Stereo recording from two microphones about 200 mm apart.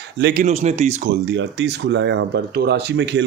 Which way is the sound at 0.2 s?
55° right (ahead or behind).